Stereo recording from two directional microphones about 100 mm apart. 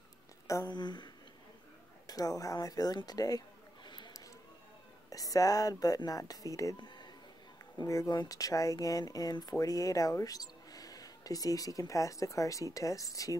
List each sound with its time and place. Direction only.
0.7 s speech: 45° left (ahead or behind)
2.0 s speech: 35° left (ahead or behind)
5.1 s speech: 35° left (ahead or behind)
6.8 s a sound: 45° left (ahead or behind)
7.8 s speech: 30° left (ahead or behind)